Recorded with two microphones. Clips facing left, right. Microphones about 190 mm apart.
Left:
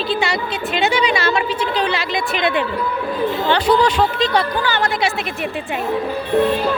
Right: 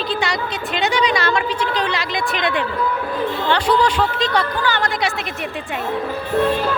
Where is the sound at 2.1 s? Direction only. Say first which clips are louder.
Left 2 dB; 25° left (ahead or behind).